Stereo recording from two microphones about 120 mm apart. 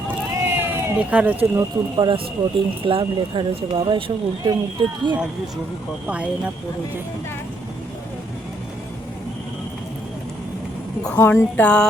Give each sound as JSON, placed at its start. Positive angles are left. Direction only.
{"t": 0.1, "sound": "run", "side_deg": -20}
{"t": 1.5, "sound": "speech", "side_deg": -40}
{"t": 6.1, "sound": "speech", "side_deg": -10}
{"t": 11.2, "sound": "speech", "side_deg": 15}